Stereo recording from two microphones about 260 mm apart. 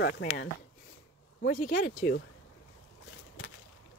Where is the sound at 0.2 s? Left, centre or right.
Left.